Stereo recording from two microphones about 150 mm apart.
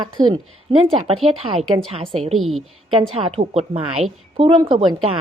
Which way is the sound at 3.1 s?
40° right (ahead or behind).